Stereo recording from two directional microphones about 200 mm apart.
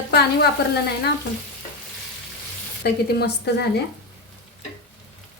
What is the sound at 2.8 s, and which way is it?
Speech, 55° left (ahead or behind).